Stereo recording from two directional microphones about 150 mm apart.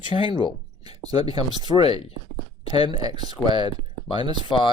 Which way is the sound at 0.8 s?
25° right (ahead or behind).